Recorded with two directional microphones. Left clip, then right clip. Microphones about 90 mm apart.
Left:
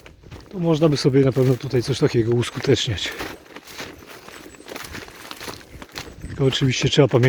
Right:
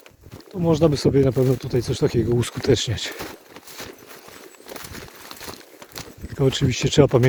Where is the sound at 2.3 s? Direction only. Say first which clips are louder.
Left 1 dB; 60° right (ahead or behind); by 3.1 s 90° right.